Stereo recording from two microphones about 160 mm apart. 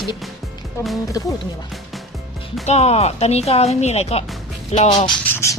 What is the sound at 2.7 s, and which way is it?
Speech, 40° left (ahead or behind).